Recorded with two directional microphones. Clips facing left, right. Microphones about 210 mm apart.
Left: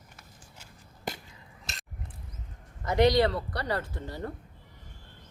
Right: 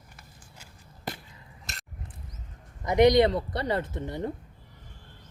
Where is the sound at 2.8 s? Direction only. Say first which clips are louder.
Right 3 dB; 15° right (ahead or behind).